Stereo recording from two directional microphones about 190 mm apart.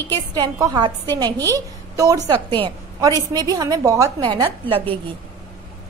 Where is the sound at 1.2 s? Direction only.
10° left (ahead or behind).